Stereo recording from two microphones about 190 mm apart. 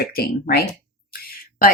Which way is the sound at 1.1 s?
50° left (ahead or behind).